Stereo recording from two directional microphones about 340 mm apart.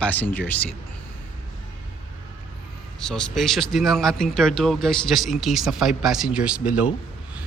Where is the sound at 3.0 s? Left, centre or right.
Centre.